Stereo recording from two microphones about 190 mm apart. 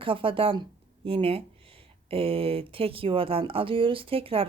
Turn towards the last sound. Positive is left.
turn(degrees=-30)  # may be behind; listen again after turning